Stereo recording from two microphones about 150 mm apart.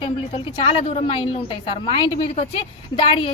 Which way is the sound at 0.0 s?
35° left (ahead or behind).